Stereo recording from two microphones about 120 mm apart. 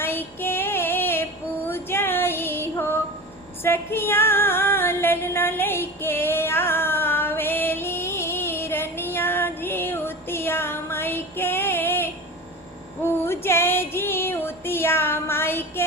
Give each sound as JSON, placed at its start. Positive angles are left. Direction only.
{"t": 0.0, "sound": "female singing", "side_deg": 20}